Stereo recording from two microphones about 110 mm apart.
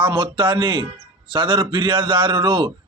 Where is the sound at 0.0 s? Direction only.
45° right (ahead or behind).